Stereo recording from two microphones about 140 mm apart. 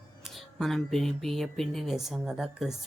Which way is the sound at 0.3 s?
Centre (ahead or behind).